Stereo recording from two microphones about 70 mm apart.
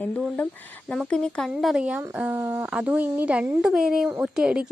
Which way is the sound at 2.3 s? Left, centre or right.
Right.